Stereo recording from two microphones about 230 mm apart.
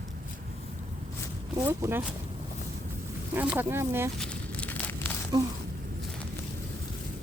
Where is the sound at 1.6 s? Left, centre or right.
Centre.